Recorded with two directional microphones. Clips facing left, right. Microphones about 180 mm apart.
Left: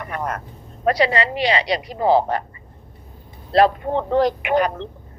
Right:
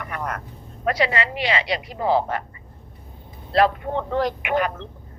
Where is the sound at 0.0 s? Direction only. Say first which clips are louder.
Left 3 dB; 30° left (ahead or behind).